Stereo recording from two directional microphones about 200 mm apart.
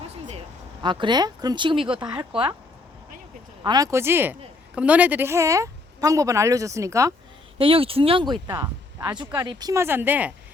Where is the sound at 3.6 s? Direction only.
20° right (ahead or behind).